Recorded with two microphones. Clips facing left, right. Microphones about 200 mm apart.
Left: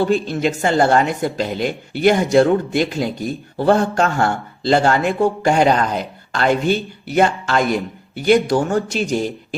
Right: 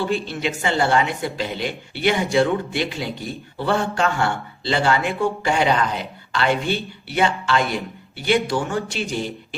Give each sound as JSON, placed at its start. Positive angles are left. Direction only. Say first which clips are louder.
{"t": 0.0, "sound": "a woman's voice", "louder": "left 6 dB", "side_deg": 45}